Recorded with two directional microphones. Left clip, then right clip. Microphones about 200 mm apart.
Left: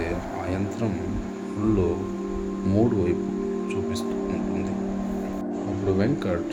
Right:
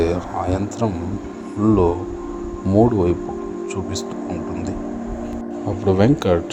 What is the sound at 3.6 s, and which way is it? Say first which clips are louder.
Speech: right 2 dB; 25° right (ahead or behind).